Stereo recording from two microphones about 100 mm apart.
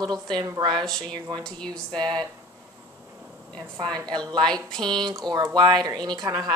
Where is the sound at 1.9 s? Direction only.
45° right (ahead or behind).